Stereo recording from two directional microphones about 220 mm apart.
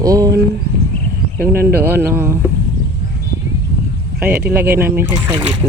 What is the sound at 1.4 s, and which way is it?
Speech, 45° right (ahead or behind).